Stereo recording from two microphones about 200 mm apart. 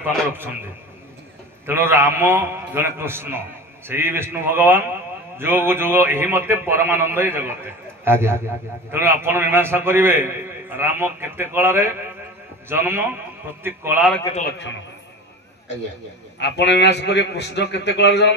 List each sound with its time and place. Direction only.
1.7 s a man's voice: 10° right (ahead or behind)
16.3 s a man's voice: 60° left (ahead or behind)